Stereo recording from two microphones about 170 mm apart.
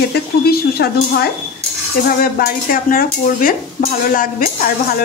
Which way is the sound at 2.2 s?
60° left (ahead or behind).